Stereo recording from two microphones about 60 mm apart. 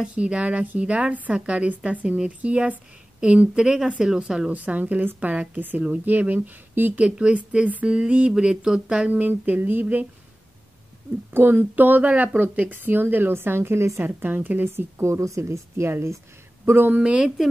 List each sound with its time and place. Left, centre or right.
0.0 s a woman's voice: centre
4.6 s a woman's voice: right
7.0 s speech: centre
9.1 s a woman's voice: right
11.3 s speech: right
14.0 s a woman's voice: right
16.6 s speech: right
17.0 s speech: centre